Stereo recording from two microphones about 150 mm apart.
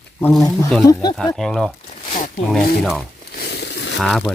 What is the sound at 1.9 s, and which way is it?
Zipper, 60° left (ahead or behind).